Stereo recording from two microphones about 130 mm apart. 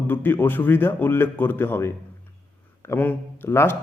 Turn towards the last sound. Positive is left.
turn(degrees=20)  # may be behind; listen again after turning